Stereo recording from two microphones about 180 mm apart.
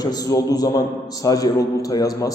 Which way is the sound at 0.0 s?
20° left (ahead or behind).